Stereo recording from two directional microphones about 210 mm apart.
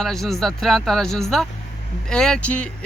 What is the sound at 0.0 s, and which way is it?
Speech, centre (ahead or behind).